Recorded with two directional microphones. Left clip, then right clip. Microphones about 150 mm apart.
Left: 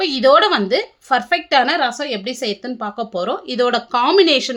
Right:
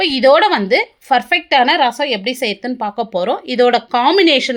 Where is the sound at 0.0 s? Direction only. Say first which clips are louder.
Right 2 dB; 20° right (ahead or behind).